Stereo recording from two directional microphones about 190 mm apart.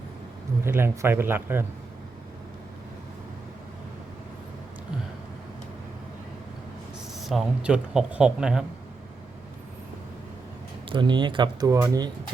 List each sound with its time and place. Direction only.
0.6 s speech: 10° right (ahead or behind)
7.2 s speech: centre (ahead or behind)
10.8 s speech: 25° right (ahead or behind)